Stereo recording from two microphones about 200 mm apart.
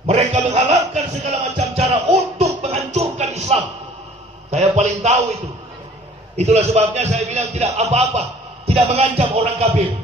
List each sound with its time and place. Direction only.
0.0 s music: 30° right (ahead or behind)
4.5 s a sound: 35° right (ahead or behind)
6.3 s a man's voice: 35° right (ahead or behind)